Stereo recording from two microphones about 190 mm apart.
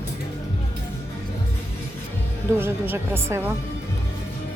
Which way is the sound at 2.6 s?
10° right (ahead or behind).